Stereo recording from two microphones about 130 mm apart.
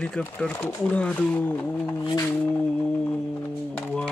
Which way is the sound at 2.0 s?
25° left (ahead or behind).